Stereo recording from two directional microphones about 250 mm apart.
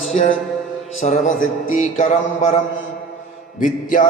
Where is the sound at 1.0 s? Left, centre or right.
Left.